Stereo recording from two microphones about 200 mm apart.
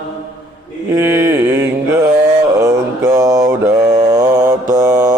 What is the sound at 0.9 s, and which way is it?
Mantra, 15° right (ahead or behind).